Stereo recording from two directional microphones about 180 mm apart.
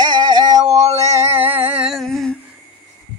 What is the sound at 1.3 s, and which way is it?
Humming, 10° right (ahead or behind).